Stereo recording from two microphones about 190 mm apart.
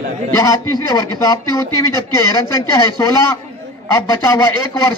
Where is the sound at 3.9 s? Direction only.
15° left (ahead or behind).